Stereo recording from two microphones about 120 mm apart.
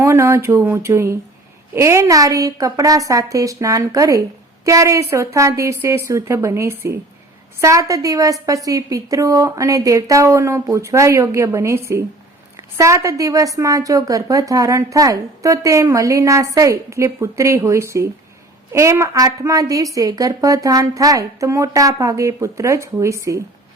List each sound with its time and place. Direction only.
0.0 s a woman's voice: 25° right (ahead or behind)